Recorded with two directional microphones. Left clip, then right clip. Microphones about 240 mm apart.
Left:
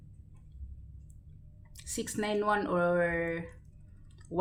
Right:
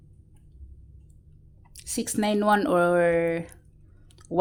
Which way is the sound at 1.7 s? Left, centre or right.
Right.